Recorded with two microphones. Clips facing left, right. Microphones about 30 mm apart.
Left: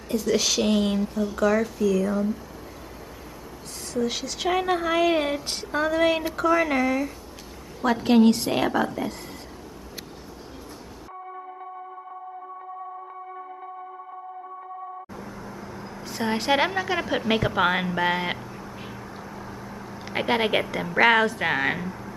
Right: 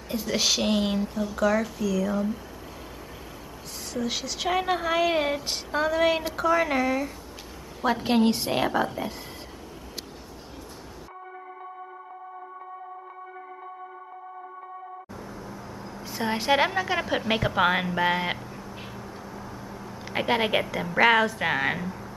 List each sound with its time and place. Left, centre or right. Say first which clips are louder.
0.1 s a woman's voice: left 2 dB; centre
3.9 s a woman's voice: left 3 dB; centre
15.1 s vehicle: left 1 dB; centre
16.0 s a woman's voice: left 2 dB; centre
19.4 s vehicle: left 1 dB; left
19.9 s a woman's voice: left 1 dB; centre